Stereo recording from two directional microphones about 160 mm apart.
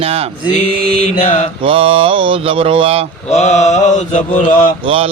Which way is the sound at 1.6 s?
35° right (ahead or behind).